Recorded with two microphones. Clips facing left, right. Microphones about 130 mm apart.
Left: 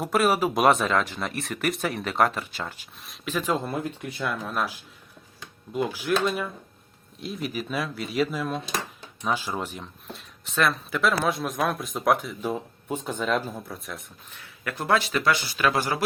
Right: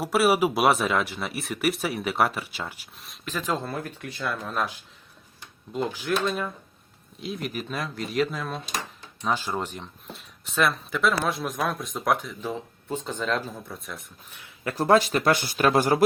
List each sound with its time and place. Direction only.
0.0 s speech: 5° right (ahead or behind)
3.0 s speech: 5° left (ahead or behind)
5.7 s speech: 10° left (ahead or behind)
14.3 s speech: 15° right (ahead or behind)
14.6 s speech: 35° right (ahead or behind); by 16.0 s 50° right (ahead or behind)